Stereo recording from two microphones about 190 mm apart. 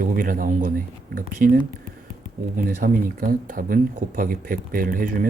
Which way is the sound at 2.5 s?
45° right (ahead or behind).